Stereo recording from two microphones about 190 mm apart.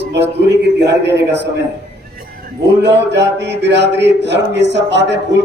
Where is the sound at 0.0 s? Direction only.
65° right (ahead or behind).